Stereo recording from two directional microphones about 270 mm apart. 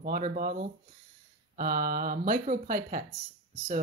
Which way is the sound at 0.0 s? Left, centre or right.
Right.